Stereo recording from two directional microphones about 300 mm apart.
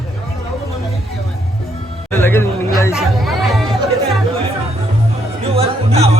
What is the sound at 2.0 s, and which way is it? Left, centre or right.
Music, centre.